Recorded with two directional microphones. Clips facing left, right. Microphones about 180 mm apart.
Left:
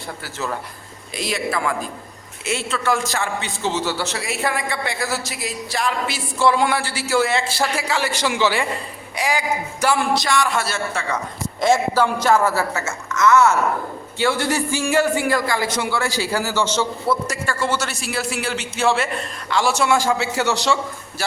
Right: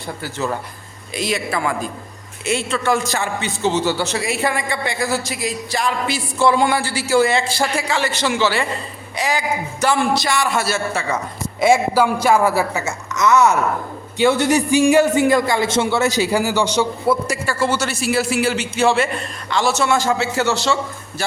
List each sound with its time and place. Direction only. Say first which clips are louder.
1.1 s a man's voice: right 2 dB; centre (ahead or behind)
10.2 s a man's voice: right 1 dB; 5° right (ahead or behind); by 20.7 s 15° left (ahead or behind)